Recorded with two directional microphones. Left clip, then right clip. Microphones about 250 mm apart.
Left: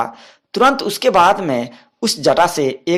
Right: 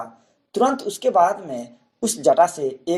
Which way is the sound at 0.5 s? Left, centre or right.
Left.